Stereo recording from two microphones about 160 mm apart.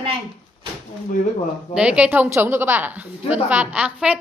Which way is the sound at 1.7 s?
5° right (ahead or behind).